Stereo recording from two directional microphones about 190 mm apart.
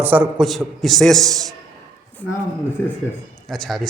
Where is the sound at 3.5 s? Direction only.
Centre (ahead or behind).